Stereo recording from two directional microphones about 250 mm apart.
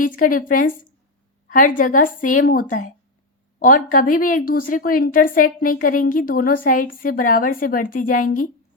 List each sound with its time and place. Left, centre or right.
0.0 s a woman's voice: left